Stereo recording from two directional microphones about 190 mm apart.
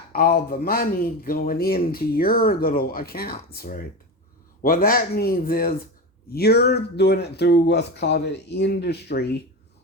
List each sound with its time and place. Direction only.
0.1 s speech: 50° left (ahead or behind)